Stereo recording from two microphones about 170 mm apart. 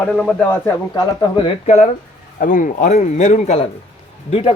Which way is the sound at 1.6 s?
40° left (ahead or behind).